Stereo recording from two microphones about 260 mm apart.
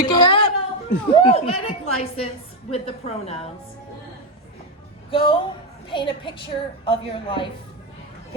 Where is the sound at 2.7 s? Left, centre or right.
Left.